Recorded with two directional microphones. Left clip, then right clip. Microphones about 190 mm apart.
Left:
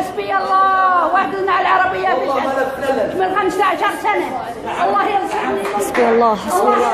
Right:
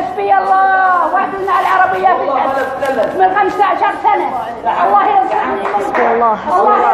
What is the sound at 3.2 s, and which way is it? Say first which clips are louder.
Speech: right 8 dB; 20° left (ahead or behind).